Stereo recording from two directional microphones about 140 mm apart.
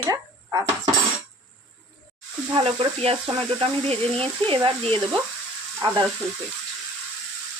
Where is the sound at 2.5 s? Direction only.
40° right (ahead or behind).